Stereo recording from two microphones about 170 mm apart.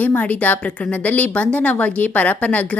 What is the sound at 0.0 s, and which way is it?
A woman's voice, 10° left (ahead or behind).